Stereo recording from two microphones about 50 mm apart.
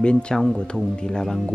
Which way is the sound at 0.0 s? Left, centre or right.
Centre.